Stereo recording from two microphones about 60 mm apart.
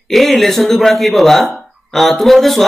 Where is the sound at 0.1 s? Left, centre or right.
Centre.